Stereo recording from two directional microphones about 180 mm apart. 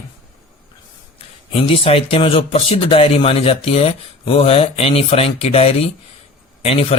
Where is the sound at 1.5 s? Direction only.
30° left (ahead or behind).